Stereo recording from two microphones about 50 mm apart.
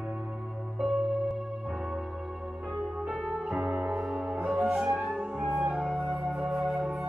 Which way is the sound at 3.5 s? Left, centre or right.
Centre.